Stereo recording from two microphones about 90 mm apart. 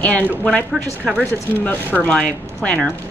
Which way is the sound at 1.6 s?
15° left (ahead or behind).